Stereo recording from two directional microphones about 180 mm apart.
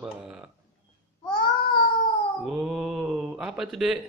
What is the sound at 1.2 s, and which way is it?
Babbling, 25° left (ahead or behind).